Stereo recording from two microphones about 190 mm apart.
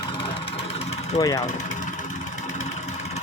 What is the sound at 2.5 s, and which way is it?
Vehicle, 35° left (ahead or behind).